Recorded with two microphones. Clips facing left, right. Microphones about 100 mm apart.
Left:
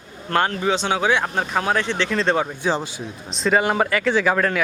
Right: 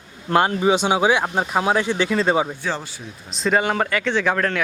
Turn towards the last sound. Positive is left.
turn(degrees=5)  # may be behind; listen again after turning